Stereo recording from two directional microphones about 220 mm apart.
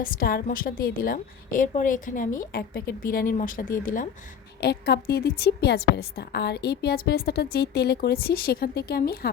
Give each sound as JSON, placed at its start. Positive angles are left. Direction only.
{"t": 0.0, "sound": "a woman's voice", "side_deg": 40}